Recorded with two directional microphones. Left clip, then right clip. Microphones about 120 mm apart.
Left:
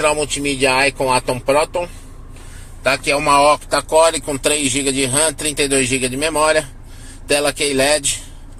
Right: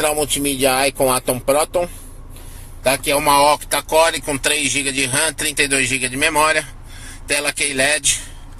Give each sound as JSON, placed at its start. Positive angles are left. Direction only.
{"t": 0.0, "sound": "speech", "side_deg": -45}
{"t": 2.8, "sound": "speech", "side_deg": -20}
{"t": 3.9, "sound": "a man's voice", "side_deg": 20}